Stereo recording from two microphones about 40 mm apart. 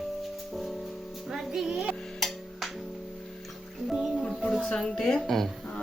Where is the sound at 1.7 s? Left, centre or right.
Right.